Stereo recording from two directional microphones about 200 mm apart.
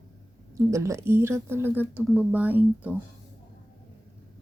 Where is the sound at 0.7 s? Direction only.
15° right (ahead or behind).